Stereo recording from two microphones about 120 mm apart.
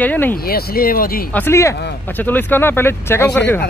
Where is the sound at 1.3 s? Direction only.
20° left (ahead or behind).